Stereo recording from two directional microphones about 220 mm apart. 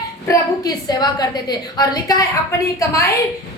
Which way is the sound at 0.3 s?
15° left (ahead or behind).